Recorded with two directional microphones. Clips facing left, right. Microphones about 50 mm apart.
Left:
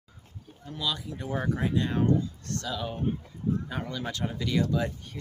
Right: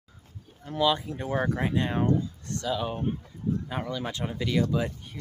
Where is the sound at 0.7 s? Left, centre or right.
Right.